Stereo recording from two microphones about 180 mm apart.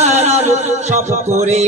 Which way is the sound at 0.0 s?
35° right (ahead or behind).